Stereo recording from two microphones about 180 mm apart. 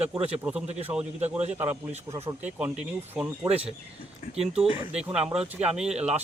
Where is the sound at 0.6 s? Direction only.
35° right (ahead or behind).